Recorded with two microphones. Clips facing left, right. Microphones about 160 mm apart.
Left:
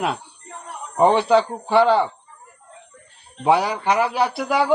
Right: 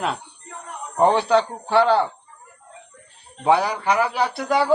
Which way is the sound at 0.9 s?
5° left (ahead or behind).